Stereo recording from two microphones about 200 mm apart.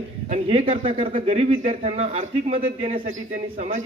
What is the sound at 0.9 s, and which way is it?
A man's voice, 40° right (ahead or behind).